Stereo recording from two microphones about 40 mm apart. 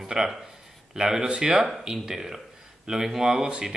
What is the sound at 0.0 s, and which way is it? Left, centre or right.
Speech, centre.